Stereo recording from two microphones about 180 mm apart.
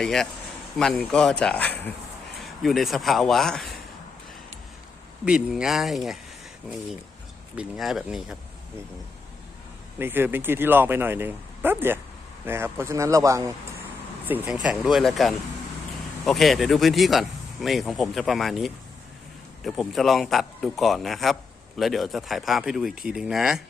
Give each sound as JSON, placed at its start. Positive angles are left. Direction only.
{"t": 0.0, "sound": "speech", "side_deg": 5}
{"t": 5.2, "sound": "speech", "side_deg": -5}
{"t": 7.5, "sound": "speech", "side_deg": -5}
{"t": 10.0, "sound": "speech", "side_deg": -10}